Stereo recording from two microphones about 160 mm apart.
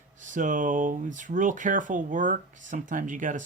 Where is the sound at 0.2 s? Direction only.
55° right (ahead or behind).